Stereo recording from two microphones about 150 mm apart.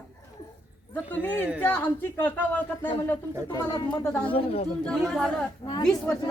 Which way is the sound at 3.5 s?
30° left (ahead or behind).